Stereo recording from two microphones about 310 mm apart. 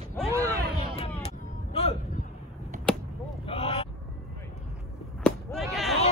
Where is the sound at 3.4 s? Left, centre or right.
Centre.